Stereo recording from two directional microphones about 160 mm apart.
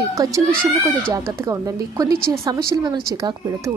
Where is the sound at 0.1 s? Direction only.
20° right (ahead or behind).